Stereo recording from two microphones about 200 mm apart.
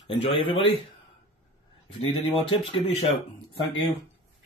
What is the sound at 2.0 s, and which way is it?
Speech, 25° left (ahead or behind).